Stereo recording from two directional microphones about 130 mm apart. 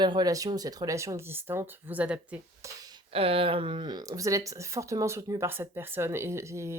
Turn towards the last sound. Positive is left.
turn(degrees=-20)  # may be behind; listen again after turning